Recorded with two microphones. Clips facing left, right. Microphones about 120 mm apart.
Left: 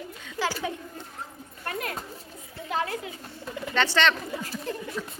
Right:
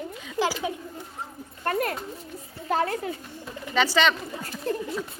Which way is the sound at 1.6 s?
45° right (ahead or behind).